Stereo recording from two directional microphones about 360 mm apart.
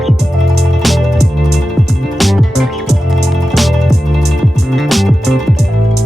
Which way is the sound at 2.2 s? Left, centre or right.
Centre.